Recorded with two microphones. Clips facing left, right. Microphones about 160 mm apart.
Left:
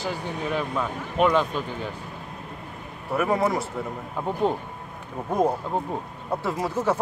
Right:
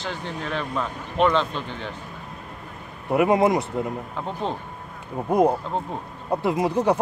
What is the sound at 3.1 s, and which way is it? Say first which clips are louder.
Speech: right 5 dB; 20° right (ahead or behind).